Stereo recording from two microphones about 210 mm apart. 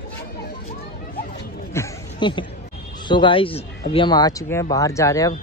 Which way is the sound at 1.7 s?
20° left (ahead or behind).